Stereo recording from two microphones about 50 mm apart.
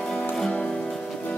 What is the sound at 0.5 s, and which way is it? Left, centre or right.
Music, left.